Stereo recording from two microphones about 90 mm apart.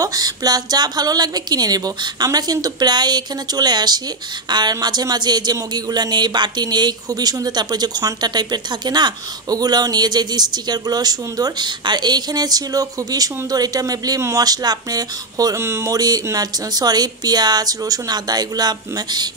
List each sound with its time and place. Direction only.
0.0 s speech: 45° right (ahead or behind)
15.6 s speech: 30° right (ahead or behind); by 19.2 s 50° right (ahead or behind)